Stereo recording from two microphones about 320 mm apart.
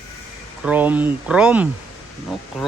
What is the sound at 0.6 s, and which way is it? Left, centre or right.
Speech, centre.